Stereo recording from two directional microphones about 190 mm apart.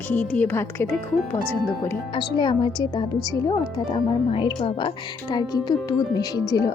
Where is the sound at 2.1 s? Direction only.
25° left (ahead or behind).